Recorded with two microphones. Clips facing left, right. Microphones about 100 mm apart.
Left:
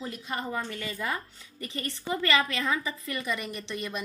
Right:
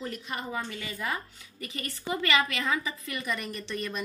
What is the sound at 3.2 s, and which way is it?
Speech, 20° left (ahead or behind).